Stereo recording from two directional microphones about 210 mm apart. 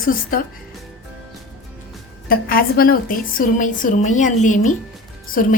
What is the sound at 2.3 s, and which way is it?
A woman's voice, 45° left (ahead or behind).